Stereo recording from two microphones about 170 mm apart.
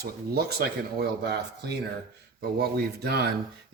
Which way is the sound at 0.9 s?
75° right (ahead or behind).